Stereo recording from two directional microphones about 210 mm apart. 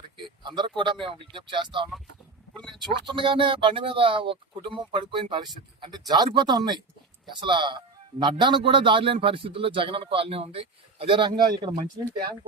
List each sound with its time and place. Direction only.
0.3 s a sound: 20° right (ahead or behind)
1.0 s speech: 25° right (ahead or behind)
2.6 s speech: centre (ahead or behind)
3.1 s speech: 25° right (ahead or behind)